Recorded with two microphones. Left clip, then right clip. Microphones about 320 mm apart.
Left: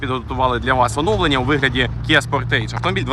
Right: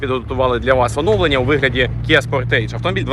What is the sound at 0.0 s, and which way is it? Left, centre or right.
Speech, centre.